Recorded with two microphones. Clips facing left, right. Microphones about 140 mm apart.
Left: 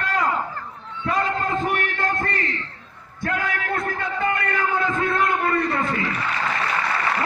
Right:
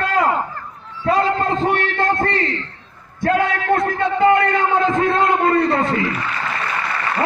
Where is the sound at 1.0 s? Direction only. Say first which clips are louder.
Right 6 dB; 35° right (ahead or behind).